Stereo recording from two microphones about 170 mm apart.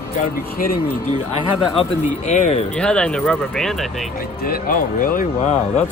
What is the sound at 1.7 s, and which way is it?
Speech, 40° left (ahead or behind).